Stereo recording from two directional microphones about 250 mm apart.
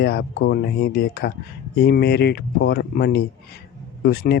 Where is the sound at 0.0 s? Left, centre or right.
Left.